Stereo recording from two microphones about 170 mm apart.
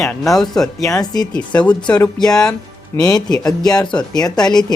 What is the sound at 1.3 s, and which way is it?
Speech, 5° left (ahead or behind).